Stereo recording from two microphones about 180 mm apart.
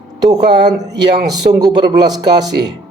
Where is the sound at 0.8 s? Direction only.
20° right (ahead or behind).